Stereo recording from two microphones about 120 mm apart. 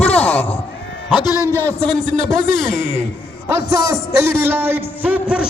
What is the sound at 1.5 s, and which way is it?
Speech, 15° left (ahead or behind).